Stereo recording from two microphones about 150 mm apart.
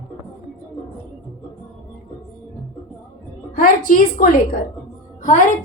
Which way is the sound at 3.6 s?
65° left (ahead or behind).